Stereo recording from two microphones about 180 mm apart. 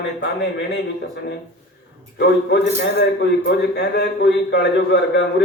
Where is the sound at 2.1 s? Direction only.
70° left (ahead or behind).